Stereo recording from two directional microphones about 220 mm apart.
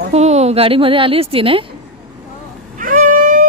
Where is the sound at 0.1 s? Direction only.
30° right (ahead or behind).